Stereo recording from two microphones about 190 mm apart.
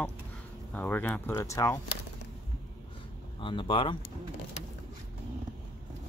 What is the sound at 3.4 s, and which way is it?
Speech, 25° left (ahead or behind).